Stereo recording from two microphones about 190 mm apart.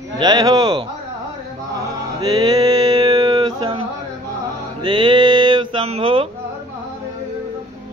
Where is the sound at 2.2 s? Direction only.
20° right (ahead or behind).